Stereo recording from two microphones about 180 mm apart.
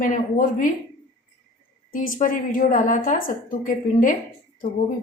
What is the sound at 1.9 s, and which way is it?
A woman's voice, 45° left (ahead or behind).